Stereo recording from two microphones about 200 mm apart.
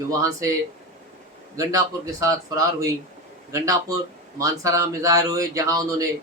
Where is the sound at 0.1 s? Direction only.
15° right (ahead or behind).